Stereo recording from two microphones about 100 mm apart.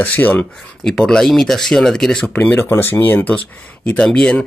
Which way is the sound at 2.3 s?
15° left (ahead or behind).